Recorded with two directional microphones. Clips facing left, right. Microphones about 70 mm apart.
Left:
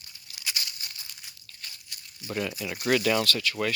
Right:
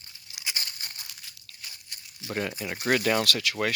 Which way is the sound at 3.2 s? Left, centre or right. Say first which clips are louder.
Even; right.